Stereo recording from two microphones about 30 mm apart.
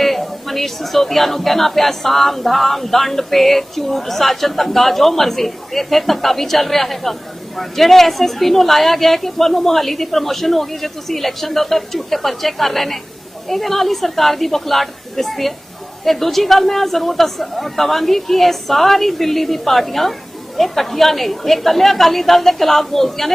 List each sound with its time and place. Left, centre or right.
0.0 s a woman's voice: centre